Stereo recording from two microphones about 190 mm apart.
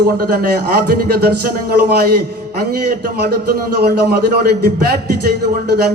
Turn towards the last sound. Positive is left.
turn(degrees=-55)  # may be behind; listen again after turning